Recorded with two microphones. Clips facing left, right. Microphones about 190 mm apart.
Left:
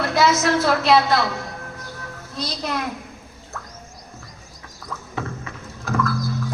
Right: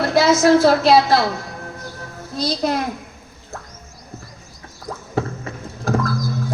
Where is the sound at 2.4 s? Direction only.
30° right (ahead or behind).